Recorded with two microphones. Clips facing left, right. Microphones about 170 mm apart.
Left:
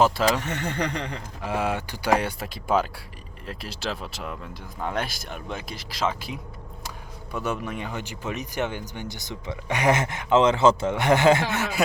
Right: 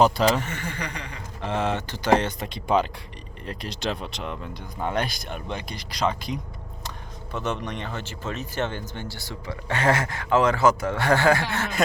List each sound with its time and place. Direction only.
0.0 s speech: centre (ahead or behind)
0.5 s speech: 60° left (ahead or behind)
1.4 s speech: 10° left (ahead or behind)